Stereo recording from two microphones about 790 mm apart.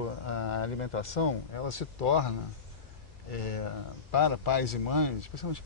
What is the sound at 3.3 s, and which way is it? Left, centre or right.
Speech, left.